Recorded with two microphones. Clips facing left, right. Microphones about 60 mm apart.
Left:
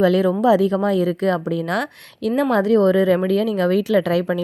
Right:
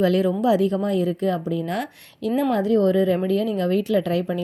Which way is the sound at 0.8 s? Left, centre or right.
Left.